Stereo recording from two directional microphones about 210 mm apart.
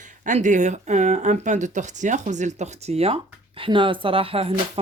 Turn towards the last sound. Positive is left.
turn(degrees=-25)  # may be behind; listen again after turning